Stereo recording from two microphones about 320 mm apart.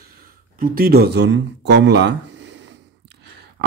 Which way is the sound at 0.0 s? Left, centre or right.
Right.